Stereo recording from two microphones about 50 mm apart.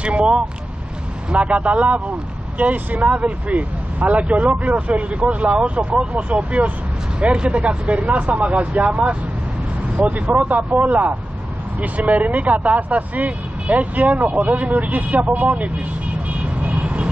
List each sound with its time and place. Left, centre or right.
0.0 s vehicle: right
1.3 s speech: right
16.3 s vehicle: right